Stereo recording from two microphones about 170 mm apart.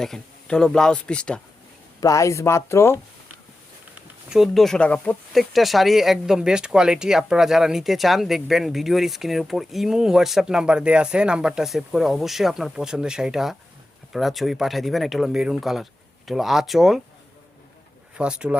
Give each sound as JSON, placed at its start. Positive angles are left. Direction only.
{"t": 0.0, "sound": "speech", "side_deg": 5}
{"t": 2.0, "sound": "speech", "side_deg": 20}
{"t": 4.3, "sound": "speech", "side_deg": 0}
{"t": 18.2, "sound": "speech", "side_deg": -5}